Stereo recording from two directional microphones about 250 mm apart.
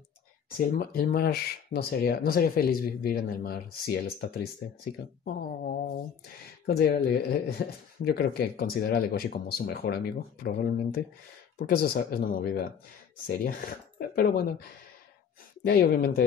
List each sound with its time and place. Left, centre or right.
0.6 s speech: left